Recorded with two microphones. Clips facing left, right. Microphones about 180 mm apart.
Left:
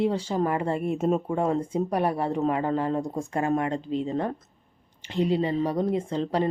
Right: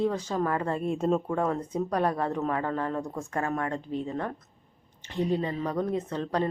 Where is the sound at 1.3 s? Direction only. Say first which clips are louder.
Left 3 dB; 20° left (ahead or behind).